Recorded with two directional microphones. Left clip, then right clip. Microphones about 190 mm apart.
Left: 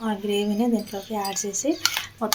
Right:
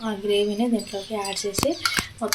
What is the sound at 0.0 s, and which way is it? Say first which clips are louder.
Speech: right 3 dB; 35° left (ahead or behind).